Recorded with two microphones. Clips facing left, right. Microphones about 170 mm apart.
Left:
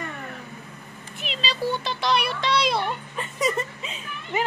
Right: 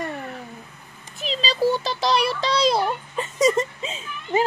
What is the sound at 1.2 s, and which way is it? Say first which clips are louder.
A child's voice: right 6 dB; 35° right (ahead or behind).